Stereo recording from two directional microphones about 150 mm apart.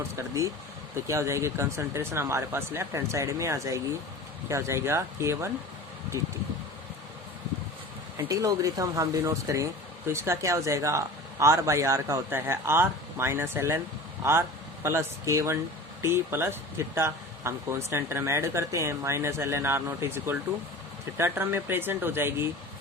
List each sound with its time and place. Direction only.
0.2 s speech: 20° right (ahead or behind)
8.1 s speech: 20° right (ahead or behind)
14.8 s speech: 20° right (ahead or behind)